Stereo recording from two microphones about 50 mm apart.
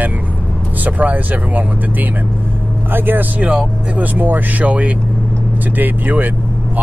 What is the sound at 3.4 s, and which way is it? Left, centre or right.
Speech, right.